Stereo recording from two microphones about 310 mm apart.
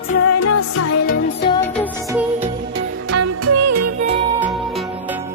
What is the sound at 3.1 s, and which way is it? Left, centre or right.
Music, right.